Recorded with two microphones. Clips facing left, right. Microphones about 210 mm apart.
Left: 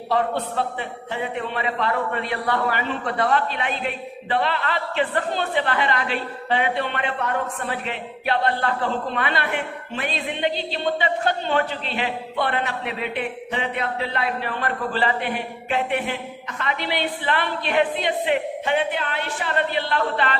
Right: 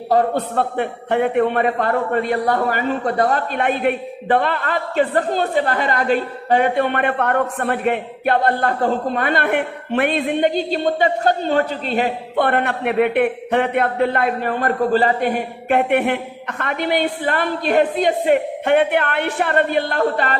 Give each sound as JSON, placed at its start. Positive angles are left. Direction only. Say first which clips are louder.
{"t": 0.1, "sound": "a man's voice", "louder": "right 6 dB", "side_deg": -50}
{"t": 15.8, "sound": "a man's voice", "louder": "right 8 dB", "side_deg": -60}